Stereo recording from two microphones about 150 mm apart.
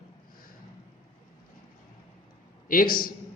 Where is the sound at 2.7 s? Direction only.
70° left (ahead or behind).